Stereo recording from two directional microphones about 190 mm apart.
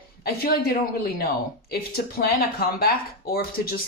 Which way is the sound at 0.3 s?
50° left (ahead or behind).